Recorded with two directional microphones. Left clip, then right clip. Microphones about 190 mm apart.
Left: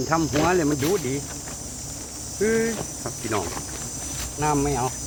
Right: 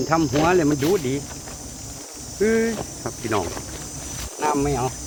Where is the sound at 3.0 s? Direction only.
45° right (ahead or behind).